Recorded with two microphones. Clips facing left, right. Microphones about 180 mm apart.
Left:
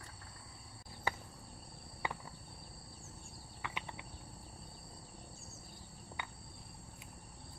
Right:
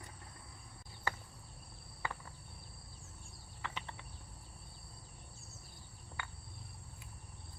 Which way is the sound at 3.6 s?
15° left (ahead or behind).